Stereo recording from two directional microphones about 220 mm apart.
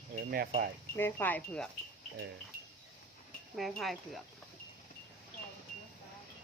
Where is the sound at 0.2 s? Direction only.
40° right (ahead or behind).